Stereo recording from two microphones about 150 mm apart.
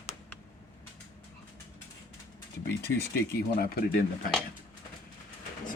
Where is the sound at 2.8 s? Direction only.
90° left.